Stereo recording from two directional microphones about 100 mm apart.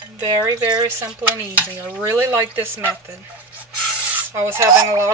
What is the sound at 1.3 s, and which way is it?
Stir, 15° right (ahead or behind).